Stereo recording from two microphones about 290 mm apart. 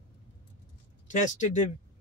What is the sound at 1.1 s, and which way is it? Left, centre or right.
Speech, left.